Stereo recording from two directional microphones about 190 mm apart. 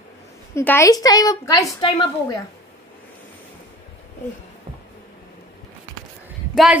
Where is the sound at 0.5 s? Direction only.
15° left (ahead or behind).